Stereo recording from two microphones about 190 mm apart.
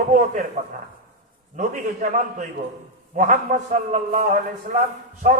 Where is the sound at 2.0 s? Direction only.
35° right (ahead or behind).